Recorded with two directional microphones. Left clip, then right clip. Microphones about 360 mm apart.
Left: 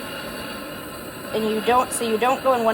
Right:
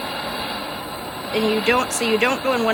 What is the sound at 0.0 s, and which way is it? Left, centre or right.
Vehicle, centre.